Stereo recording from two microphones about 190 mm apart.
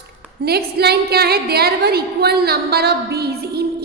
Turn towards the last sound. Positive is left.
turn(degrees=-55)  # may be behind; listen again after turning